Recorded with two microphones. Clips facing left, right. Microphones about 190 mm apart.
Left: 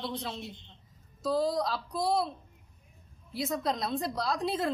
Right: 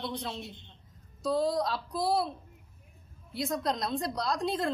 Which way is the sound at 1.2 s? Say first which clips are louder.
Even; centre (ahead or behind).